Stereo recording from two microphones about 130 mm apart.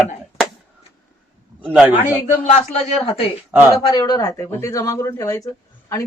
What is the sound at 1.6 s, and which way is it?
Speech, 10° right (ahead or behind).